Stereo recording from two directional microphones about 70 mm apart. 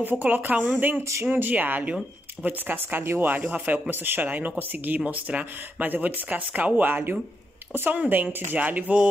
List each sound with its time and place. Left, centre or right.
0.0 s speech: right